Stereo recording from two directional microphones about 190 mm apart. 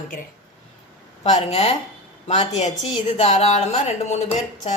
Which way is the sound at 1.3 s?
35° left (ahead or behind).